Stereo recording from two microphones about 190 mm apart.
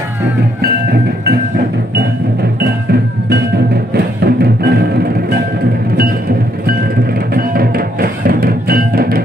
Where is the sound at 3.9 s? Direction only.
55° right (ahead or behind).